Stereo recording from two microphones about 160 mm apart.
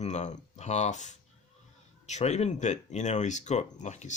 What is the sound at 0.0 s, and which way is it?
Speech, 45° left (ahead or behind).